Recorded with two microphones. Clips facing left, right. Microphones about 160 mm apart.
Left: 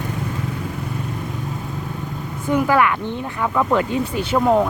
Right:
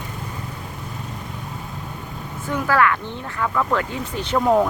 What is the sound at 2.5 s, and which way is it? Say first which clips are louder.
Speech: left 3 dB; 15° left (ahead or behind).